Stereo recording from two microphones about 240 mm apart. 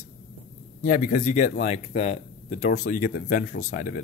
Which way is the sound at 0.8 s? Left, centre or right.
Left.